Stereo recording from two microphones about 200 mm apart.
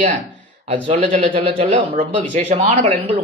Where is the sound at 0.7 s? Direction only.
30° right (ahead or behind).